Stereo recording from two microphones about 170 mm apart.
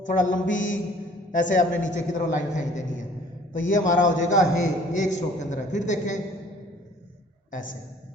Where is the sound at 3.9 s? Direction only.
50° left (ahead or behind).